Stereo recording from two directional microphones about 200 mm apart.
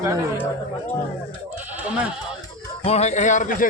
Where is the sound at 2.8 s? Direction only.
35° left (ahead or behind).